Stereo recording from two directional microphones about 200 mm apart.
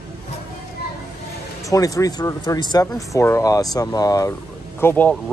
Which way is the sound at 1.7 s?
15° left (ahead or behind).